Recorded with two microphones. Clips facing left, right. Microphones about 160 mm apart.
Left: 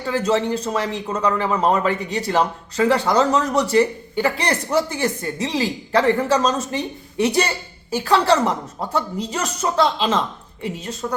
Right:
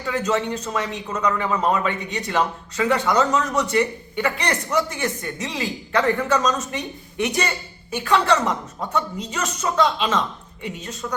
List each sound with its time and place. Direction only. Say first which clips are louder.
0.0 s speech: left 3 dB; 30° left (ahead or behind)